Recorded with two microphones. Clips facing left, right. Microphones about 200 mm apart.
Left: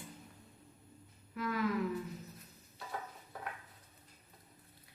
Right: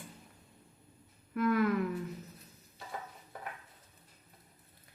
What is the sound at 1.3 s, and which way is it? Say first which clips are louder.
Speech: right 8 dB; 55° right (ahead or behind).